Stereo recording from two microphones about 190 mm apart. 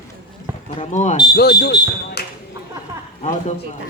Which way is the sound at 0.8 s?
40° left (ahead or behind).